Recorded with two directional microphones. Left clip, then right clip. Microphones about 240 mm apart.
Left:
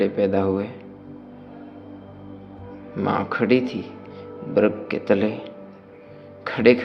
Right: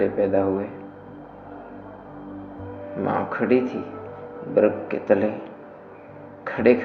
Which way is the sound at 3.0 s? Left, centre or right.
Left.